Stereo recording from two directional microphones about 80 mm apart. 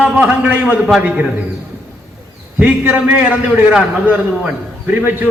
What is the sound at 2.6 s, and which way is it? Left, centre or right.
A man's voice, centre.